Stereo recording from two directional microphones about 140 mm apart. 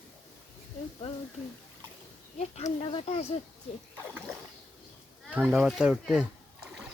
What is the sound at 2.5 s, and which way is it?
Speech, 50° left (ahead or behind).